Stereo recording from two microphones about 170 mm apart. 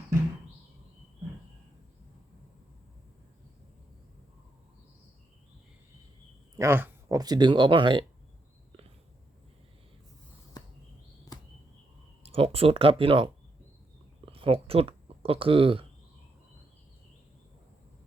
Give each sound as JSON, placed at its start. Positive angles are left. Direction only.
{"t": 6.6, "sound": "speech", "side_deg": -15}
{"t": 11.3, "sound": "a sound", "side_deg": 20}
{"t": 12.2, "sound": "speech", "side_deg": -35}